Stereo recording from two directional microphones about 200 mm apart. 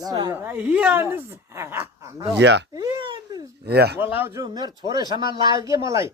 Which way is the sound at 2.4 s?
60° right (ahead or behind).